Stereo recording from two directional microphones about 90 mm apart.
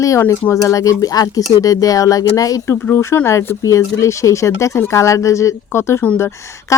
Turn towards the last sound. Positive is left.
turn(degrees=35)  # may be behind; listen again after turning